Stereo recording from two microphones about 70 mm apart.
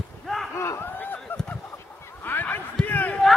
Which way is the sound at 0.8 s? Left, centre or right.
Left.